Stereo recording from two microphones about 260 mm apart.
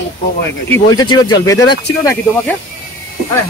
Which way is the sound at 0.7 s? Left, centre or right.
Centre.